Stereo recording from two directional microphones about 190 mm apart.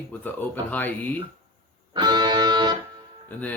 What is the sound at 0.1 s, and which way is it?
Speech, 10° left (ahead or behind).